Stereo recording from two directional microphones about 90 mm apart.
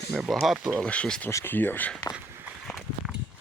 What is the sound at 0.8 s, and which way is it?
Speech, 10° left (ahead or behind).